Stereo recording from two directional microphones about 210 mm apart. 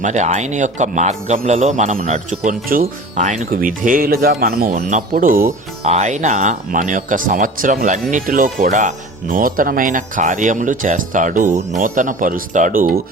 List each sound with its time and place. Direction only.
0.0 s a man's voice: 35° right (ahead or behind)